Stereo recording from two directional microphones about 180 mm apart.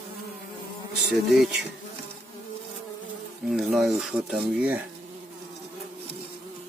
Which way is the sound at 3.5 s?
Centre (ahead or behind).